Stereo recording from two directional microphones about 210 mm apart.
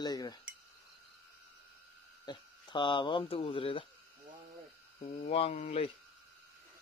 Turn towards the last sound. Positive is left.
turn(degrees=30)  # may be behind; listen again after turning